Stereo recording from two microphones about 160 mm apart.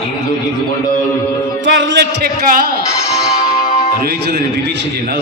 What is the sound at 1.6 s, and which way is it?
Speech, 90° right.